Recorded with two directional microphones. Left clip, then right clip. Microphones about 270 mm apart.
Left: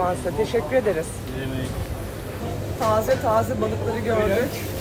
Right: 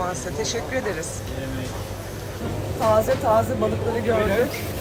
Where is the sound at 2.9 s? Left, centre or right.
Centre.